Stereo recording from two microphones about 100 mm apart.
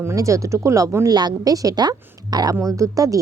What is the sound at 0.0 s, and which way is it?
A woman's voice, 30° right (ahead or behind).